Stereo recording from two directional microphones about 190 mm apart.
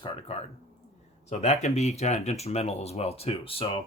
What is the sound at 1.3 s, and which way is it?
Speech, 35° left (ahead or behind).